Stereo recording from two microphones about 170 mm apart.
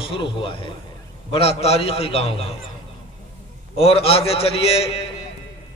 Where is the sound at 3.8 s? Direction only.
35° left (ahead or behind).